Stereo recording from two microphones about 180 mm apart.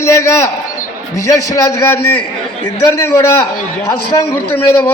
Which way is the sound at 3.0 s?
15° left (ahead or behind).